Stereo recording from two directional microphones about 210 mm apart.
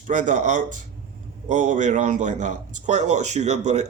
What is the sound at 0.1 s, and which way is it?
A man's voice, 35° right (ahead or behind).